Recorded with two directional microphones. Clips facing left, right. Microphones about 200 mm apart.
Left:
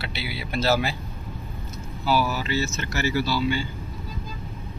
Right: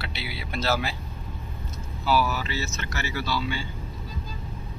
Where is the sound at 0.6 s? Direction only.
35° left (ahead or behind).